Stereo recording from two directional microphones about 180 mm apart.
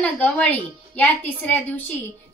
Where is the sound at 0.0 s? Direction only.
10° left (ahead or behind).